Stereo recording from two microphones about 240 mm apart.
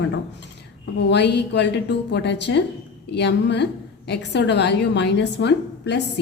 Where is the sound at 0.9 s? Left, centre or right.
Left.